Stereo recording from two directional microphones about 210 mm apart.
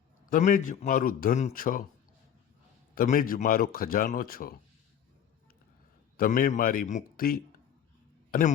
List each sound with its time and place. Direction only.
0.3 s a man's voice: 40° left (ahead or behind)
2.9 s a man's voice: 45° left (ahead or behind)
6.1 s a man's voice: 45° left (ahead or behind)